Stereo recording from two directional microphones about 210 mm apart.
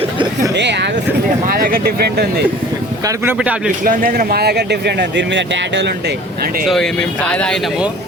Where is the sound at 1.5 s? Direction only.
45° right (ahead or behind).